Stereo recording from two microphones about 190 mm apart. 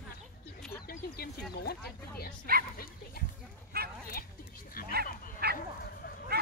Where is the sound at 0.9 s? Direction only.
55° left (ahead or behind).